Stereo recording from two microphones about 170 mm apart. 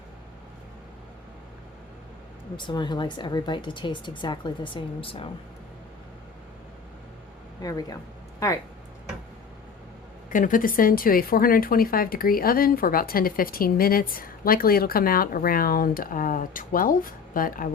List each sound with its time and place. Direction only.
2.6 s speech: 25° left (ahead or behind)
7.6 s speech: 20° left (ahead or behind)
10.2 s speech: 50° left (ahead or behind)